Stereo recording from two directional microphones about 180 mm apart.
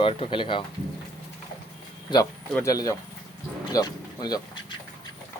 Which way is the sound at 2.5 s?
15° left (ahead or behind).